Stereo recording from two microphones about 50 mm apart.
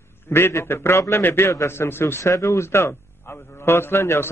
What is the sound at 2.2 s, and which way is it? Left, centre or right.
A man's voice, left.